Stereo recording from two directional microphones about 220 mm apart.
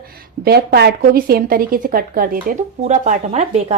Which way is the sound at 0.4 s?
45° right (ahead or behind).